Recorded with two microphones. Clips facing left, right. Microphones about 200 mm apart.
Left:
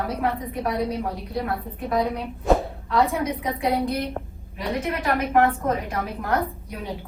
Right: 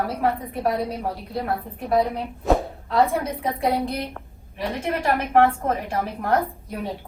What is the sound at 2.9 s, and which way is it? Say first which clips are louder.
A woman's voice: right 1 dB; 30° right (ahead or behind).